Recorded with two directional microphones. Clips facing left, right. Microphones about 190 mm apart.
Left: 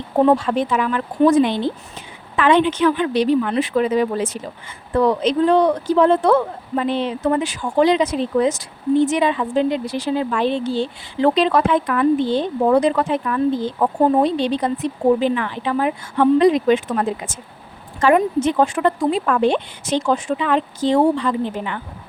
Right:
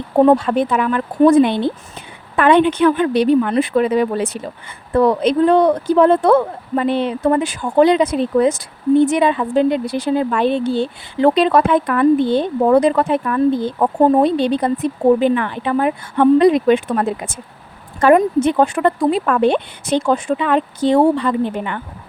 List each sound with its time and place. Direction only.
0.3 s speech: 55° right (ahead or behind)